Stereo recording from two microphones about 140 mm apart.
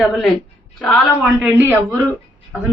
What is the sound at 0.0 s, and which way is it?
A woman's voice, centre (ahead or behind).